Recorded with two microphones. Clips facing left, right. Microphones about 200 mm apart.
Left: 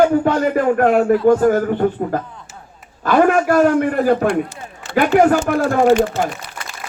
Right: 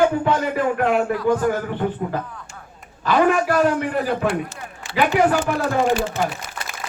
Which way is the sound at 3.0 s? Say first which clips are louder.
Left 4 dB; 50° left (ahead or behind).